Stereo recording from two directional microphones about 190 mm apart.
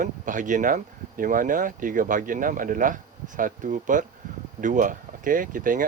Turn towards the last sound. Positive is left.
turn(degrees=-45)  # may be behind; listen again after turning